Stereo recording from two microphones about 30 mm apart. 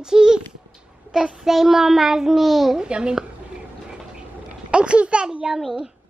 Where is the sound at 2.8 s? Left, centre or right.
Right.